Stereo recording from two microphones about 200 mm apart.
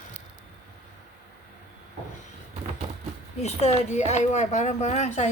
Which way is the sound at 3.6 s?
35° left (ahead or behind).